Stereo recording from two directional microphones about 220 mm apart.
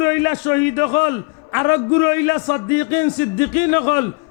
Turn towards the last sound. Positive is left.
turn(degrees=15)  # may be behind; listen again after turning